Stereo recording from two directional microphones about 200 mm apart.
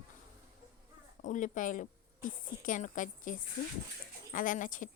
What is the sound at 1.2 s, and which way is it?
A woman's voice, 40° left (ahead or behind).